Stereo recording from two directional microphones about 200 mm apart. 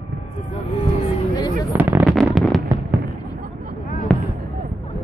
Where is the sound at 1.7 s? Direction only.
10° right (ahead or behind).